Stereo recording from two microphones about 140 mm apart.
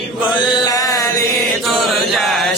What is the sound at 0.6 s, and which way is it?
Mantra, 25° left (ahead or behind).